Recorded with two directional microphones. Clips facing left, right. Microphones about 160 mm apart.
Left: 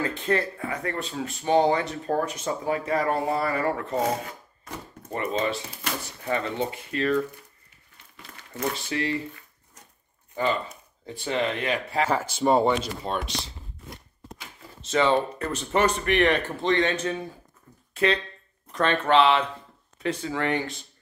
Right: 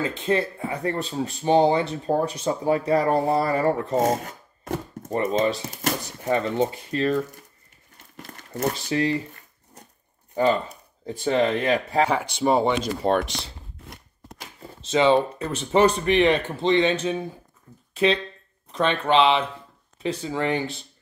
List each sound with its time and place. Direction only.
0.0 s speech: 20° right (ahead or behind)
8.0 s crumpling: 45° right (ahead or behind)
11.2 s speech: 35° right (ahead or behind)
12.4 s speech: 5° right (ahead or behind)
13.0 s speech: 60° right (ahead or behind)
14.9 s speech: 20° right (ahead or behind)